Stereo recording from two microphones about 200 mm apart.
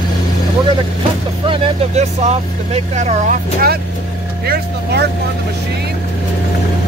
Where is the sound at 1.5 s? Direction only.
35° right (ahead or behind).